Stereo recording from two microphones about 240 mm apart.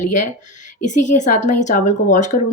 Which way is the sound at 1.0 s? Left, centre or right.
Left.